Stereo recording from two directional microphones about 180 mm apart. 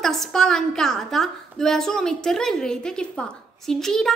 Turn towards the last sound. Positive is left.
turn(degrees=0)  # may be behind; listen again after turning